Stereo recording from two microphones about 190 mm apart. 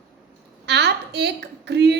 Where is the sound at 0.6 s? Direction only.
60° right (ahead or behind).